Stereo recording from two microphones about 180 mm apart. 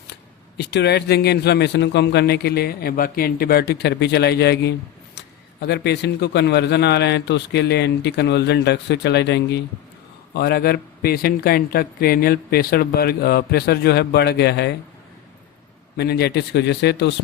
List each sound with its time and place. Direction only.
0.1 s speech: 70° left (ahead or behind)
10.3 s speech: 60° left (ahead or behind)
16.0 s speech: 65° left (ahead or behind)